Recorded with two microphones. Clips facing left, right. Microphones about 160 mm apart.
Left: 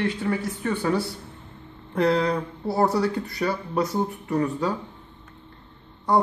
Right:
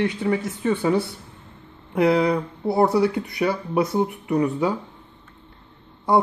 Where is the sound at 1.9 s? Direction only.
5° right (ahead or behind).